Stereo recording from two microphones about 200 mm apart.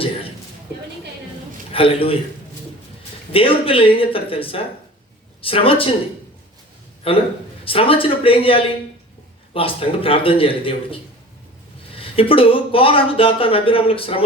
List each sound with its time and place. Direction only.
1.7 s a man's voice: 25° left (ahead or behind)
3.3 s a man's voice: 25° left (ahead or behind)
7.1 s a man's voice: 25° left (ahead or behind)
11.9 s a man's voice: 30° left (ahead or behind)